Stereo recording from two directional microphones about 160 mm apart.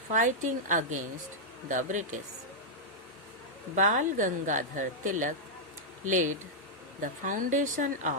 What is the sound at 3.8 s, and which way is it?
Speech, 55° right (ahead or behind).